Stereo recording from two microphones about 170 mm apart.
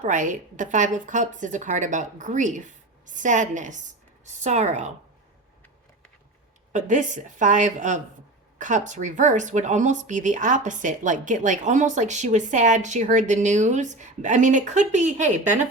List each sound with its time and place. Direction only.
0.0 s speech: 45° right (ahead or behind)
6.7 s speech: 45° right (ahead or behind)